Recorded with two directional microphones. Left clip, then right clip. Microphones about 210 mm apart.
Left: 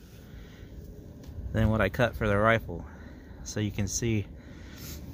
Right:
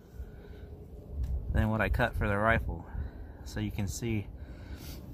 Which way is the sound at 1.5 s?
20° left (ahead or behind).